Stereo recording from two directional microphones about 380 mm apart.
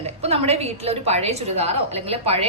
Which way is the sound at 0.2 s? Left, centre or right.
Centre.